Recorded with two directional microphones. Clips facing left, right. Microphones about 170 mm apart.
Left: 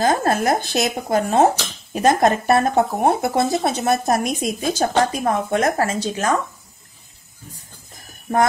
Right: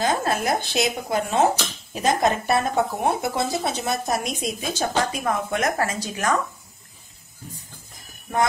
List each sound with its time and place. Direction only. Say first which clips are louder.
0.0 s speech: left 5 dB; 45° left (ahead or behind); by 6.3 s 25° left (ahead or behind)